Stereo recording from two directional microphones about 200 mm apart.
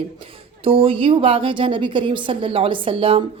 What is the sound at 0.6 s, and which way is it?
Speech, 25° right (ahead or behind).